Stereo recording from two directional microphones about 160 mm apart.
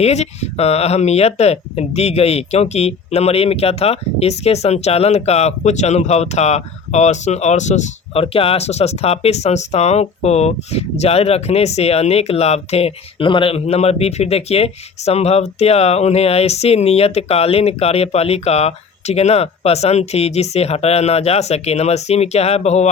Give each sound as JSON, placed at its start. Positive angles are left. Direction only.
{"t": 0.0, "sound": "speech", "side_deg": 40}